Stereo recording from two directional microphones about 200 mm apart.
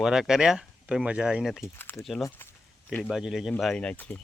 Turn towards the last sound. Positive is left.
turn(degrees=10)  # may be behind; listen again after turning